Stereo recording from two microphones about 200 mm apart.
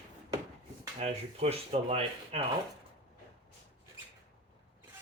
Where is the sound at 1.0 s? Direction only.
30° right (ahead or behind).